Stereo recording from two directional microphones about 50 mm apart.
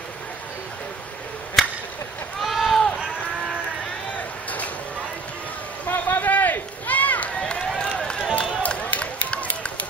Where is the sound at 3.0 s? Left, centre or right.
Centre.